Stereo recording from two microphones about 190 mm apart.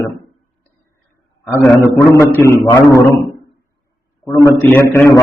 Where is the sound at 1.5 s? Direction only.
10° left (ahead or behind).